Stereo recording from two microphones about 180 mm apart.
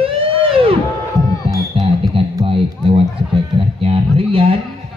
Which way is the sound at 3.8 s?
30° right (ahead or behind).